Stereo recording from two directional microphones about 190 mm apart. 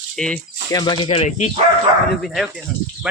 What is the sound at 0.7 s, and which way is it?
Speech, 25° left (ahead or behind).